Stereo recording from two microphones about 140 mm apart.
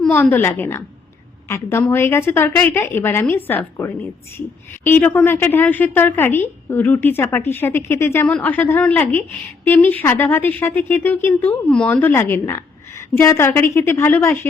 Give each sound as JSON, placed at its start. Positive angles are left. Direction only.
{"t": 0.1, "sound": "speech", "side_deg": 15}